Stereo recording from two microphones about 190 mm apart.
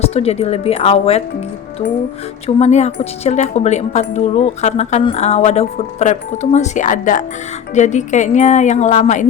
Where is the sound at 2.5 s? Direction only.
35° left (ahead or behind).